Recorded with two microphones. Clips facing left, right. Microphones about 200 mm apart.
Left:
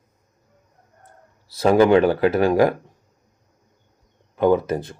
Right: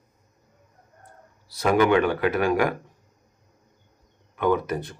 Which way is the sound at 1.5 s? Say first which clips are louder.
Left 5 dB; 30° left (ahead or behind).